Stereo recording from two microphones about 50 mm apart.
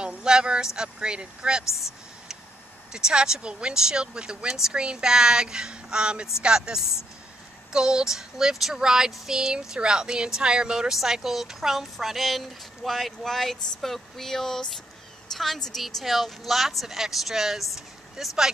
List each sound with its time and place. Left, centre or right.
0.0 s a sound: centre
0.7 s child singing: centre
2.9 s child singing: centre
15.3 s a woman's voice: centre